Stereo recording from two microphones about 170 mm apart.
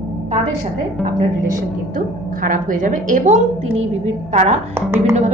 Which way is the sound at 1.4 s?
55° right (ahead or behind).